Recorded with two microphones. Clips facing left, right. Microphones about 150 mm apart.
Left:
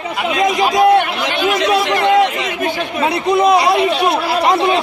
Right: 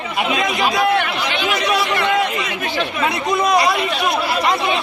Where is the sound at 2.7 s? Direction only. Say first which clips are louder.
Left 2 dB; 35° left (ahead or behind).